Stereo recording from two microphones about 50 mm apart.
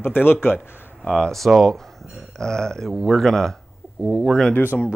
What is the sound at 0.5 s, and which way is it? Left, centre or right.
Speech, centre.